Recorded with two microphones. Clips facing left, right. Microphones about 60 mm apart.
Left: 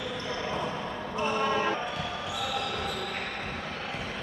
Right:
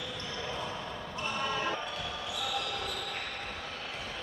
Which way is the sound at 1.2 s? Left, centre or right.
Left.